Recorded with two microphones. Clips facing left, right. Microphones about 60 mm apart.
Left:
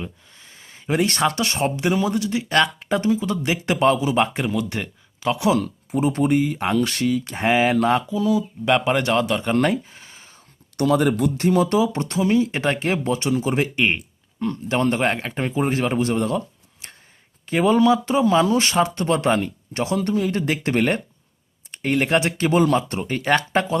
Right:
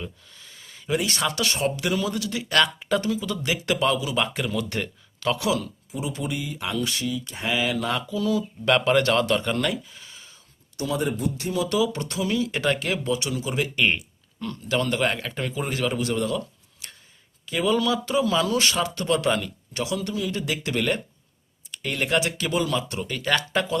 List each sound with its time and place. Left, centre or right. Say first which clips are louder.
0.0 s a sound: left 3 dB; left
1.4 s speech: left 3 dB; left
4.5 s speech: left 3 dB; centre
5.5 s speech: left 5 dB; left
8.2 s speech: left 4 dB; centre
9.4 s a sound: left 6 dB; left
10.8 s speech: left 8 dB; left
13.7 s speech: left 2 dB; left
16.8 s a sound: left 1 dB; left
17.4 s speech: left 6 dB; left